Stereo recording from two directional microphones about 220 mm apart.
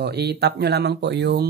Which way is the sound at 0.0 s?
50° right (ahead or behind).